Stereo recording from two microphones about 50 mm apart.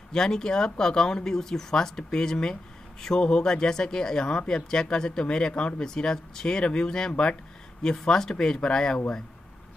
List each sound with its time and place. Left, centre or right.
0.1 s speech: centre